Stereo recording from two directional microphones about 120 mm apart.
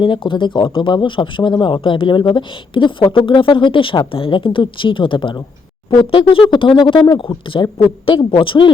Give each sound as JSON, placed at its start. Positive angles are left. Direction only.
{"t": 0.0, "sound": "speech", "side_deg": 45}